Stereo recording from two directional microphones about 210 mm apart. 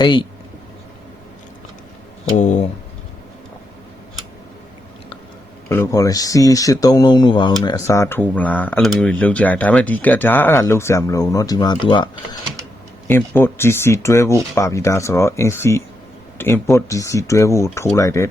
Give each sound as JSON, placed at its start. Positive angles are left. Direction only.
{"t": 0.0, "sound": "speech", "side_deg": 20}
{"t": 2.3, "sound": "speech", "side_deg": 35}
{"t": 5.6, "sound": "speech", "side_deg": 10}
{"t": 13.1, "sound": "speech", "side_deg": 10}